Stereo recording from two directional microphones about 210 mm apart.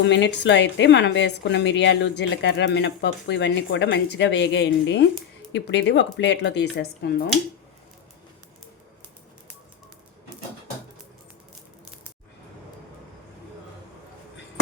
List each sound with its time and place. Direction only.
0.0 s a woman's voice: 60° left (ahead or behind)